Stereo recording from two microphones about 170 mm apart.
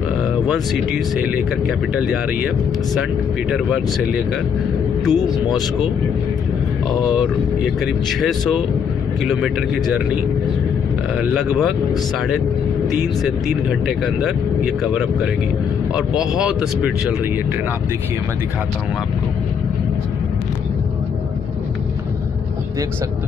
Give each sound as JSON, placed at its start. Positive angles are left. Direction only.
{"t": 0.5, "sound": "speech", "side_deg": 0}
{"t": 6.9, "sound": "speech", "side_deg": -5}
{"t": 11.1, "sound": "speech", "side_deg": -5}
{"t": 13.2, "sound": "speech", "side_deg": -5}
{"t": 16.1, "sound": "speech", "side_deg": -5}